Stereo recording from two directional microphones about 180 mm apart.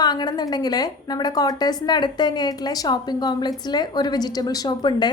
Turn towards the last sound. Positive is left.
turn(degrees=25)  # may be behind; listen again after turning